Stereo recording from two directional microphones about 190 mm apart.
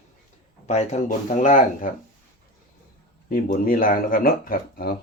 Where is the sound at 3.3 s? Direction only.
50° left (ahead or behind).